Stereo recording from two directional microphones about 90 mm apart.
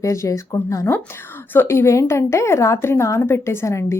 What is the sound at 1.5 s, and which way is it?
A woman's voice, 25° left (ahead or behind).